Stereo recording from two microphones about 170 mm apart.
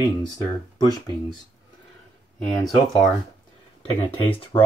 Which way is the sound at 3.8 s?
35° left (ahead or behind).